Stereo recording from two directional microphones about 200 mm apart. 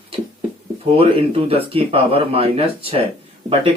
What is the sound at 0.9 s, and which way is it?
Speech, 30° right (ahead or behind).